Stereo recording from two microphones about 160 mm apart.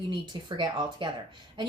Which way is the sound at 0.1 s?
30° right (ahead or behind).